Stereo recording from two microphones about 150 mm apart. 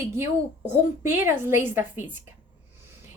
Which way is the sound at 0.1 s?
15° right (ahead or behind).